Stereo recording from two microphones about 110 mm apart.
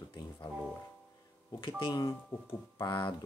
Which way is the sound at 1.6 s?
50° left (ahead or behind).